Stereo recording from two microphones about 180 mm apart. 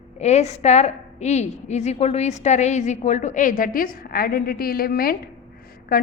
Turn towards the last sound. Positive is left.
turn(degrees=50)  # may be behind; listen again after turning